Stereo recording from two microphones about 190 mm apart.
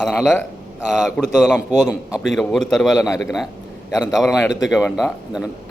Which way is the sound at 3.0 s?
15° left (ahead or behind).